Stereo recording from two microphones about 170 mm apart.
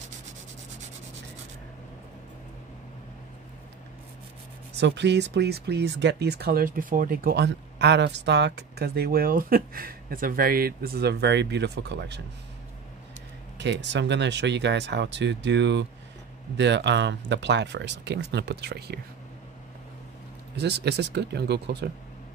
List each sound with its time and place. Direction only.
4.7 s speech: 90° right
13.6 s speech: 90° right; by 18.9 s 70° right (ahead or behind)
20.5 s speech: 80° right